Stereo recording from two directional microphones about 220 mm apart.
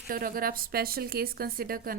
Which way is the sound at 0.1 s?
40° right (ahead or behind).